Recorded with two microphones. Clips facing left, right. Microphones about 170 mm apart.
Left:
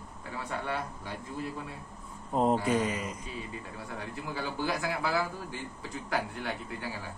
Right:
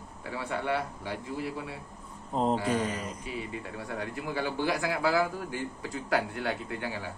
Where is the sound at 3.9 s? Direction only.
90° right.